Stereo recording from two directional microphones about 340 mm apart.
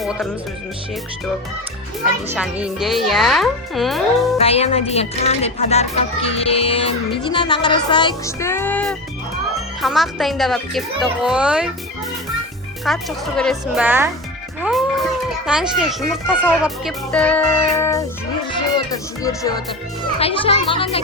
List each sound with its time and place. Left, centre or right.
2.0 s speech: centre
4.4 s a child's voice: centre
12.8 s speech: centre
14.6 s music: centre
15.4 s speech: centre
20.1 s a child's voice: centre